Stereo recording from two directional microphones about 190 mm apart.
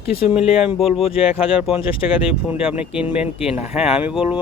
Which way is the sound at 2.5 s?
5° right (ahead or behind).